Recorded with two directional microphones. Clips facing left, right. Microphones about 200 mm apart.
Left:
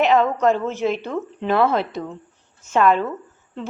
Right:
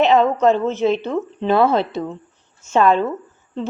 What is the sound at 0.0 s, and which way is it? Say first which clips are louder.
A woman's voice: right 3 dB; 25° right (ahead or behind).